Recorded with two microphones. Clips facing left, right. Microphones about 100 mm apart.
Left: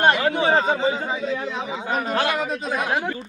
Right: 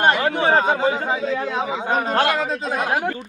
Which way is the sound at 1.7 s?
35° right (ahead or behind).